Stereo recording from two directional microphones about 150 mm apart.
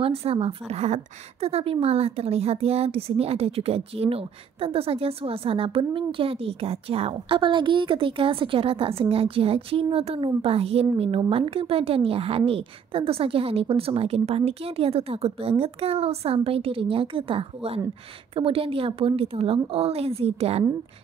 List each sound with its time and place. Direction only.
0.0 s a woman's voice: 40° right (ahead or behind)